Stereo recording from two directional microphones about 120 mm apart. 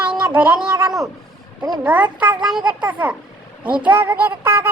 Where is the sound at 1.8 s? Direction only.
10° right (ahead or behind).